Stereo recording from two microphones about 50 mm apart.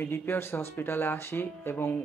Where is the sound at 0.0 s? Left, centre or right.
Left.